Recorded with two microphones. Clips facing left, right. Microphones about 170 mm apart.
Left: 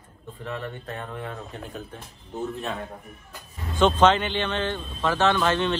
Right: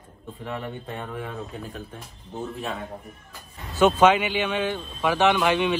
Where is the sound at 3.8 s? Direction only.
10° right (ahead or behind).